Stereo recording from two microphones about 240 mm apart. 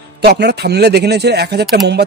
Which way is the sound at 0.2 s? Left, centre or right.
Right.